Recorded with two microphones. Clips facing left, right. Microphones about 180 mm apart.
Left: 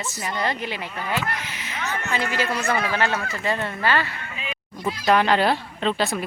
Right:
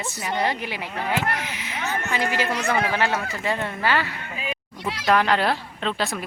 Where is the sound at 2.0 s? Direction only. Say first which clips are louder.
Even; 15° right (ahead or behind).